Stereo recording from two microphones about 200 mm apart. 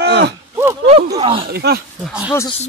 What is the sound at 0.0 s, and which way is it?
Speech, 55° right (ahead or behind).